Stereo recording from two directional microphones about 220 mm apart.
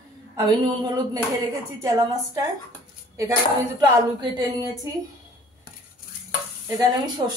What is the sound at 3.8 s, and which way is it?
Speech, 15° right (ahead or behind).